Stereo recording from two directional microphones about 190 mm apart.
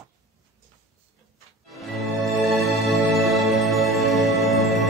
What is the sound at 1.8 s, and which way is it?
Music, centre (ahead or behind).